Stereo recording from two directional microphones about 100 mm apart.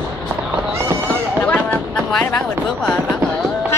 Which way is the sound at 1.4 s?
15° left (ahead or behind).